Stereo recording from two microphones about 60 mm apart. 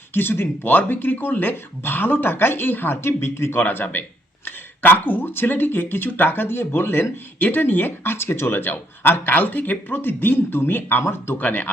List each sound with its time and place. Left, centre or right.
0.1 s speech: left
3.6 s speech: left